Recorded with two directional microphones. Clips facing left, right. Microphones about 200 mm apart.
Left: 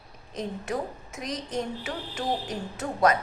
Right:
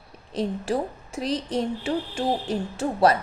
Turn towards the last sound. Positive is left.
turn(degrees=-30)  # may be behind; listen again after turning